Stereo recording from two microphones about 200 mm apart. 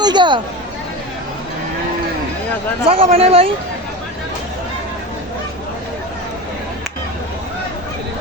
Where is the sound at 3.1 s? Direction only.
30° right (ahead or behind).